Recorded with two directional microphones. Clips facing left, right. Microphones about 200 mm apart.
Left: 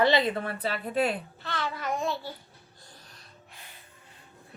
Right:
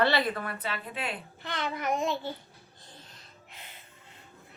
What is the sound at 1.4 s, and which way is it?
Babbling, 20° right (ahead or behind).